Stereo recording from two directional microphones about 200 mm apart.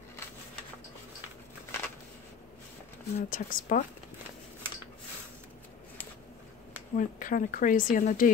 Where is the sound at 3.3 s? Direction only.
45° left (ahead or behind).